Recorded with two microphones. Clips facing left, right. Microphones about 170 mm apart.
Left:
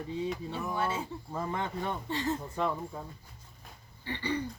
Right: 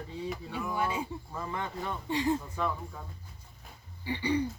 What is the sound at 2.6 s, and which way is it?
Speech, 20° left (ahead or behind).